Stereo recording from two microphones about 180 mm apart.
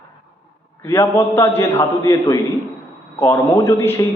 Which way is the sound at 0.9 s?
15° left (ahead or behind).